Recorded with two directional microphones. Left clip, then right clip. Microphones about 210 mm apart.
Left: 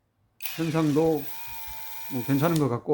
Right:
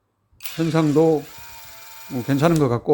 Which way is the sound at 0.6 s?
25° right (ahead or behind).